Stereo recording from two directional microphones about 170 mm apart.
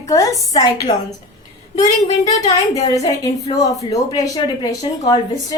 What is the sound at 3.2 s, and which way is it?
A woman's voice, 20° left (ahead or behind).